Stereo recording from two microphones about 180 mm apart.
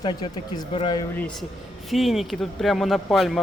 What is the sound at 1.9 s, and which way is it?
A man's voice, centre (ahead or behind).